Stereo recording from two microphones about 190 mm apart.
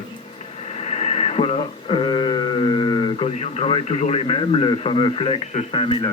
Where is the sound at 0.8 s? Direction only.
35° left (ahead or behind).